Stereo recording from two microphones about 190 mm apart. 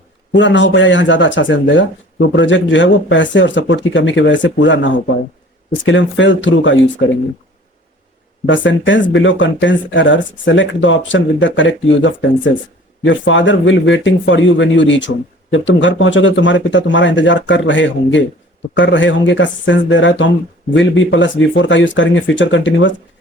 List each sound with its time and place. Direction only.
0.3 s speech: 75° left (ahead or behind)
8.4 s speech: 75° left (ahead or behind)